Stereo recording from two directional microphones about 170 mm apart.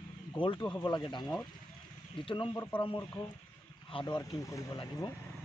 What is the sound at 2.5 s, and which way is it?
Speech, 15° left (ahead or behind).